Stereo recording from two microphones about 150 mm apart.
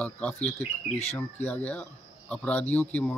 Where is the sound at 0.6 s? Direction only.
45° left (ahead or behind).